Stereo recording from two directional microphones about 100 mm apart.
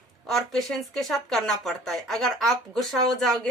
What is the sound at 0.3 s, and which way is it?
Speech, centre (ahead or behind).